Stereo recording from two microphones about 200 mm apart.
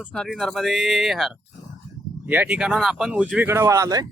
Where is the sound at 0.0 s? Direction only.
Centre (ahead or behind); by 4.0 s 15° right (ahead or behind).